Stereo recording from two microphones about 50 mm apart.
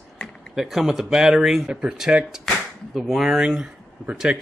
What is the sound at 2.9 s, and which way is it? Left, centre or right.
Speech, centre.